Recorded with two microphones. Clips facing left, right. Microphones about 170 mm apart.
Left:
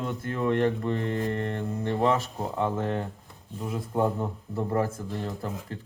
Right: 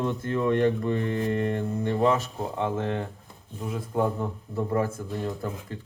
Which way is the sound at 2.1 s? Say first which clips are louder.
Even; 35° left (ahead or behind).